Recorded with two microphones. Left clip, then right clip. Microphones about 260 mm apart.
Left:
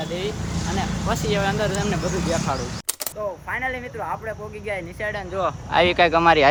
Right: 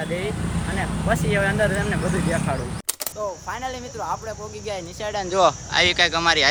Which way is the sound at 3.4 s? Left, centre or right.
Centre.